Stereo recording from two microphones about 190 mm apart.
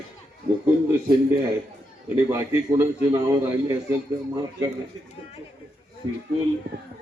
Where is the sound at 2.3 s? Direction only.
15° right (ahead or behind).